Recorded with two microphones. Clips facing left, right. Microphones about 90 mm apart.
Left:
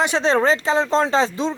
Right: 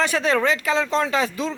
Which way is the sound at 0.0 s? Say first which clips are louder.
Left 2 dB; 25° left (ahead or behind).